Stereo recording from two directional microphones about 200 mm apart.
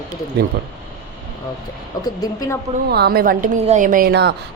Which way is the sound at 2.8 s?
55° right (ahead or behind).